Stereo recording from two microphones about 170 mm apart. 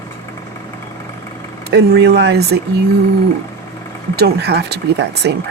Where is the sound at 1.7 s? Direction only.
75° right (ahead or behind).